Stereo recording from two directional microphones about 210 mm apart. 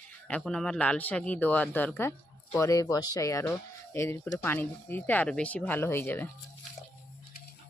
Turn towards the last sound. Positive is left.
turn(degrees=10)  # may be behind; listen again after turning